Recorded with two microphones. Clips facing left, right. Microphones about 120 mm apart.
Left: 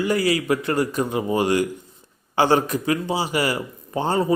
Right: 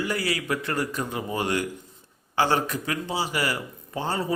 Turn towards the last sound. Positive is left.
turn(degrees=20)  # may be behind; listen again after turning